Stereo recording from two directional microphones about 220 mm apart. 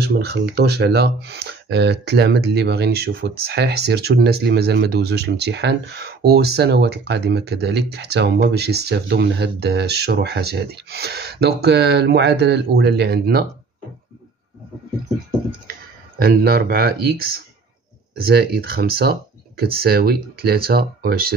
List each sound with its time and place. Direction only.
0.0 s speech: 50° right (ahead or behind)
16.2 s speech: 45° right (ahead or behind)